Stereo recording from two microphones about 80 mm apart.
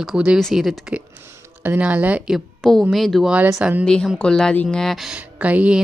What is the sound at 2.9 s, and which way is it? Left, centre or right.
Speech, centre.